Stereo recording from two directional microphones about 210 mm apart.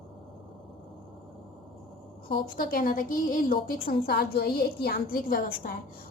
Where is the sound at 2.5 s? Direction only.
45° left (ahead or behind).